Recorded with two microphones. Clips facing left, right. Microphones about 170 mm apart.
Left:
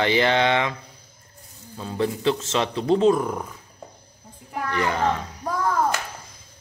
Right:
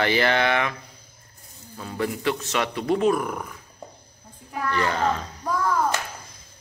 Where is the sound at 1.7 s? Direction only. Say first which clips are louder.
Left 3 dB; 20° left (ahead or behind).